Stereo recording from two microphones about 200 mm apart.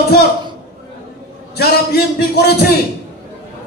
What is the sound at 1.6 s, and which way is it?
A man's voice, 50° left (ahead or behind).